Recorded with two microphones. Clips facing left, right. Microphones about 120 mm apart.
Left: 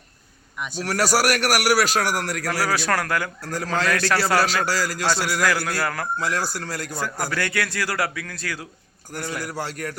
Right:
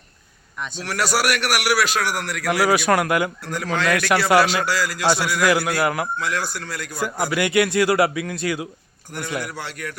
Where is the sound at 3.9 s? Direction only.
15° right (ahead or behind).